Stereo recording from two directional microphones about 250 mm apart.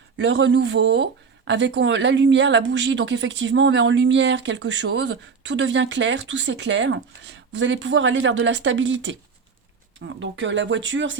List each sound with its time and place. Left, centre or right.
0.2 s speech: right
10.2 s speech: right